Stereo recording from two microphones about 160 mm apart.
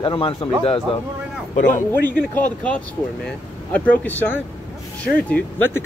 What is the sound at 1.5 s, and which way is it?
Speech, 55° left (ahead or behind).